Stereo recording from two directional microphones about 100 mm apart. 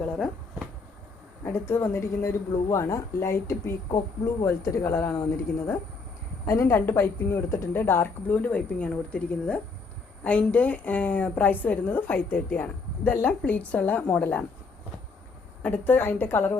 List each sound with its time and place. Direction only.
0.0 s a sound: 5° left (ahead or behind)
1.5 s speech: 25° left (ahead or behind)
3.8 s speech: 40° left (ahead or behind)
4.4 s speech: 30° left (ahead or behind)
6.4 s a woman's voice: 30° left (ahead or behind); by 14.4 s 15° left (ahead or behind)
15.6 s speech: 20° left (ahead or behind)